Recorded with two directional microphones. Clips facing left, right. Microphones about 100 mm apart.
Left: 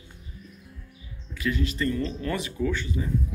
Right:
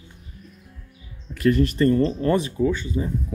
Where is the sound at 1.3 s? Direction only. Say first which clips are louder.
Right 9 dB; 55° right (ahead or behind); by 3.1 s 25° right (ahead or behind).